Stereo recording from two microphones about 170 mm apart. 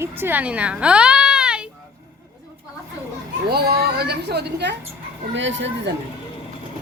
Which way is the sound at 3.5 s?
65° right (ahead or behind).